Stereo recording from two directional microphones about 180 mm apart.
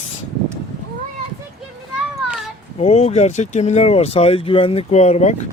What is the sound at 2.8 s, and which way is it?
Speech, 35° left (ahead or behind).